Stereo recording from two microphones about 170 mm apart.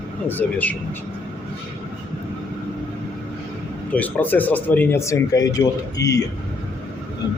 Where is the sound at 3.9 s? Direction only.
10° left (ahead or behind).